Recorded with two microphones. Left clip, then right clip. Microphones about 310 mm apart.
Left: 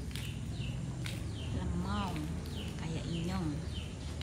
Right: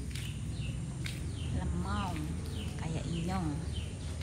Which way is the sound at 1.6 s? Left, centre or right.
Centre.